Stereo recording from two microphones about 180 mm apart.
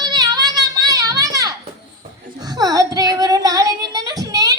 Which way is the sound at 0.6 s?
20° right (ahead or behind).